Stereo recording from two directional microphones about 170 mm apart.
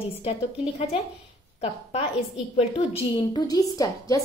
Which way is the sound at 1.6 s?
35° left (ahead or behind).